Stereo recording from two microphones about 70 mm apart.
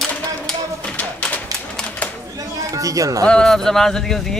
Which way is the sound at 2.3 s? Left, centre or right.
Right.